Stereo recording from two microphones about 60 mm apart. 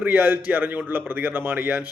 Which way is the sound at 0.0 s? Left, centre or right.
Right.